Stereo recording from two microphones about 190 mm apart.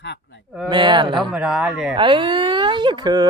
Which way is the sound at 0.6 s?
25° right (ahead or behind).